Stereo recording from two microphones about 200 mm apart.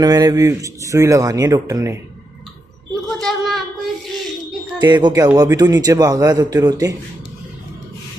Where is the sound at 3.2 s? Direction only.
Centre (ahead or behind).